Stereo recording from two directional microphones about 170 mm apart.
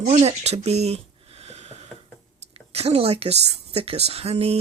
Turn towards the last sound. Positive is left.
turn(degrees=-35)  # may be behind; listen again after turning